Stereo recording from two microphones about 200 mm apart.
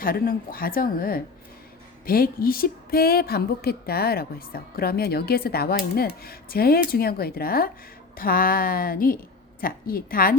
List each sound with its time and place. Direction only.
0.0 s speech: 45° left (ahead or behind)